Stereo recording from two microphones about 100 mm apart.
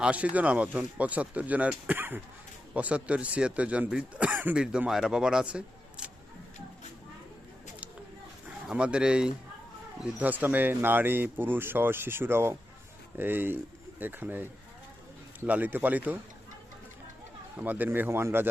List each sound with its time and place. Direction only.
0.0 s speech: 15° right (ahead or behind)
8.6 s speech: 10° right (ahead or behind)
15.4 s speech: 15° right (ahead or behind)
17.6 s speech: 20° right (ahead or behind)